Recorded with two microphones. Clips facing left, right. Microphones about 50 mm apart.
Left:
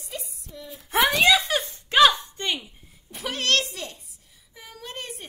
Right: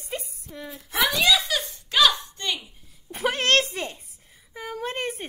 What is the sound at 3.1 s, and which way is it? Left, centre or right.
A woman's voice, right.